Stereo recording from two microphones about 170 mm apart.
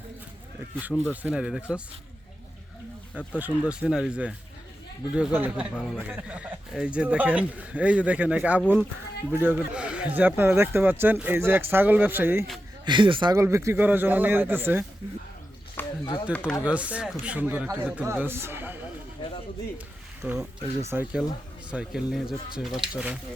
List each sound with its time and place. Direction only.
0.8 s speech: 10° right (ahead or behind)
3.2 s speech: 10° right (ahead or behind)
12.8 s speech: 30° right (ahead or behind)
13.3 s speech: 15° right (ahead or behind)
15.8 s a sound: 10° left (ahead or behind)
16.3 s speech: 10° left (ahead or behind)
16.6 s speech: 10° right (ahead or behind)
20.2 s speech: 5° right (ahead or behind)